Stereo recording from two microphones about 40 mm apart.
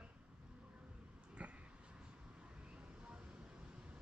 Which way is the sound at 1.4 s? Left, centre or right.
Right.